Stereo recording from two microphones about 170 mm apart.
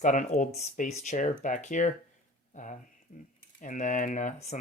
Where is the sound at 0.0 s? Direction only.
45° left (ahead or behind).